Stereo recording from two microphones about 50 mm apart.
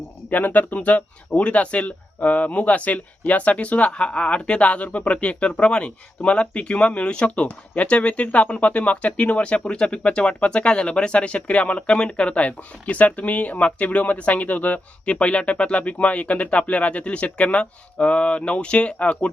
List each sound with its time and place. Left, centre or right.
0.3 s speech: left